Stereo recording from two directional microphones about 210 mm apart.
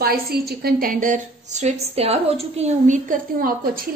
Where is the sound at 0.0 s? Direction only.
45° right (ahead or behind).